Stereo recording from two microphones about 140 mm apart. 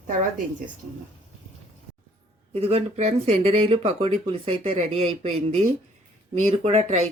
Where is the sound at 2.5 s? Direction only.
45° right (ahead or behind).